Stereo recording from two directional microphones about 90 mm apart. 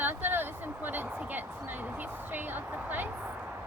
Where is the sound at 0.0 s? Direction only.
20° right (ahead or behind).